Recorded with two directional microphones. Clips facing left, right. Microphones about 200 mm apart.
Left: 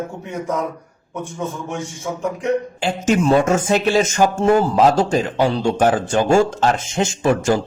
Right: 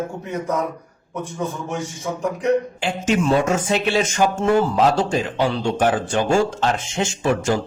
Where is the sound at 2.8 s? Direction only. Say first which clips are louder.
Left 3 dB; 40° left (ahead or behind).